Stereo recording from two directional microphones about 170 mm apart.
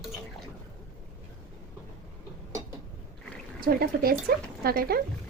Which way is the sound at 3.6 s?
60° right (ahead or behind).